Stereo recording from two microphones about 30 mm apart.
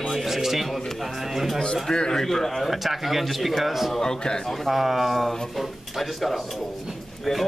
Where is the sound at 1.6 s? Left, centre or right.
Left.